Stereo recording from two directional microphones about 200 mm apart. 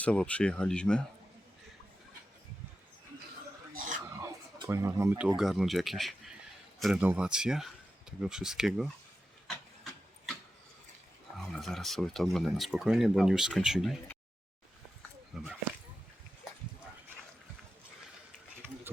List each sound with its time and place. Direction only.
0.0 s speech: 5° left (ahead or behind)
3.7 s a sound: 40° right (ahead or behind)
4.2 s chicken: 20° right (ahead or behind)
5.4 s speech: centre (ahead or behind)
11.3 s speech: centre (ahead or behind)
15.3 s speech: centre (ahead or behind)